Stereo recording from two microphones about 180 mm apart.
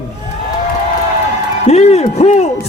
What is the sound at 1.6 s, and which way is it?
Speech, 35° left (ahead or behind).